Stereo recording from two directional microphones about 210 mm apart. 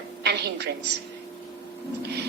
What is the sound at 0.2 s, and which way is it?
Speech, 55° right (ahead or behind).